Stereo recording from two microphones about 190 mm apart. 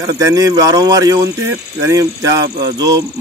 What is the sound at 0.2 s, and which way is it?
Speech, 15° right (ahead or behind).